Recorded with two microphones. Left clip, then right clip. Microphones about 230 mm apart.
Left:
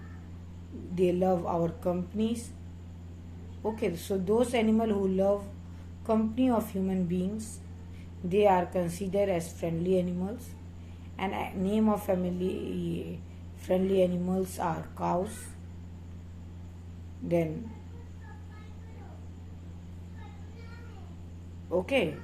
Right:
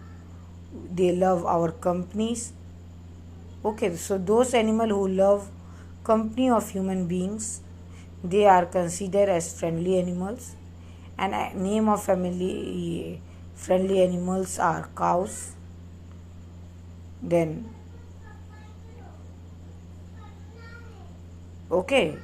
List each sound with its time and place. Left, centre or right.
0.9 s a woman's voice: right
3.6 s a woman's voice: right
17.2 s a woman's voice: right
21.7 s a woman's voice: centre